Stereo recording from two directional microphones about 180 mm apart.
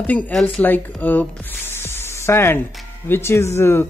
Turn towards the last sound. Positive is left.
turn(degrees=15)  # may be behind; listen again after turning